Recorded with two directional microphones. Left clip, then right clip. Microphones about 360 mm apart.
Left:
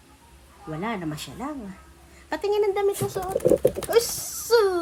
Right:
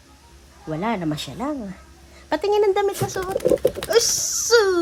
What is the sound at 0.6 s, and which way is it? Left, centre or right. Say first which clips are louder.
Speech: right 6 dB; right.